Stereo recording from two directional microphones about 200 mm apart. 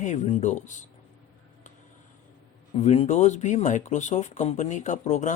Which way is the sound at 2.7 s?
30° left (ahead or behind).